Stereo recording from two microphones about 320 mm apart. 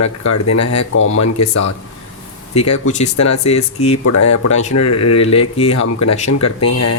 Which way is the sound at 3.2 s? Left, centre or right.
Left.